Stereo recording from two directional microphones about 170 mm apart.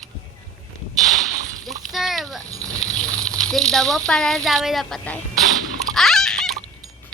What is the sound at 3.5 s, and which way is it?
A child's voice, centre (ahead or behind).